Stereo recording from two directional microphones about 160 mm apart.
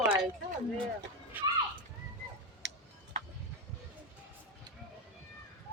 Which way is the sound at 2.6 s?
90° right.